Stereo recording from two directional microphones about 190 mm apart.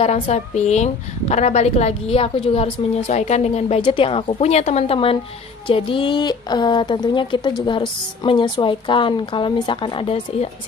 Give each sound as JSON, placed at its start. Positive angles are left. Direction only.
{"t": 0.0, "sound": "a woman's voice", "side_deg": 35}